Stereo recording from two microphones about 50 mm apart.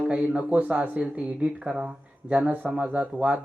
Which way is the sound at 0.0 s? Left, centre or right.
Right.